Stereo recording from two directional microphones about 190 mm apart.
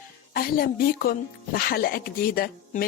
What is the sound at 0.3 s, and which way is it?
A woman's voice, 50° left (ahead or behind).